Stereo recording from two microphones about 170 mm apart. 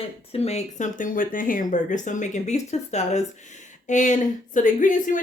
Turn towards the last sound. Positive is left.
turn(degrees=50)  # may be behind; listen again after turning